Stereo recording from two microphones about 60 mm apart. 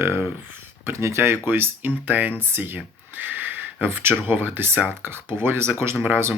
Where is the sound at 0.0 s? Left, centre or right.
Right.